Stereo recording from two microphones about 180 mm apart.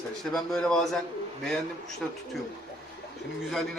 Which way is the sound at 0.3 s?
Centre (ahead or behind).